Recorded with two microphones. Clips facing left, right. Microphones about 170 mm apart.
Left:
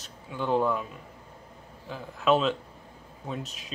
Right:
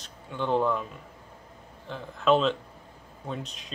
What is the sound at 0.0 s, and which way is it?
Speech, 5° left (ahead or behind).